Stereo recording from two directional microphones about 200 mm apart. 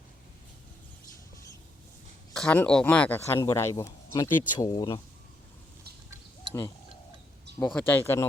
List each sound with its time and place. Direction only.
2.3 s speech: 5° left (ahead or behind)
7.6 s speech: 5° left (ahead or behind)